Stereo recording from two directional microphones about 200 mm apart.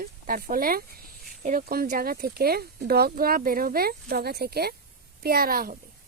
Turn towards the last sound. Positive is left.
turn(degrees=-45)  # may be behind; listen again after turning